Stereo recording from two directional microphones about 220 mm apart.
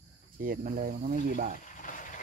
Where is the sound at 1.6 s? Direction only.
35° left (ahead or behind).